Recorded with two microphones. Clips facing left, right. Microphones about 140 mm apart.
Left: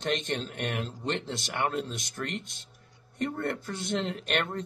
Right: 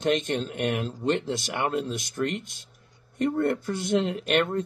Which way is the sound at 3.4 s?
5° right (ahead or behind).